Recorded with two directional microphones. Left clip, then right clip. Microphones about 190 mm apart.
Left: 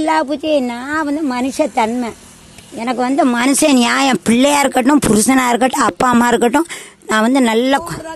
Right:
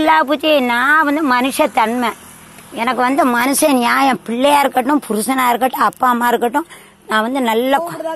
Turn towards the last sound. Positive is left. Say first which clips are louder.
# even
turn(degrees=40)  # may be behind; listen again after turning